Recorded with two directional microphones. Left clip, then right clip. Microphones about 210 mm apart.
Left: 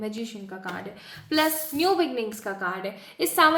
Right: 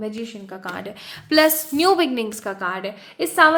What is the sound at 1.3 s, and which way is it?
A woman's voice, 55° right (ahead or behind).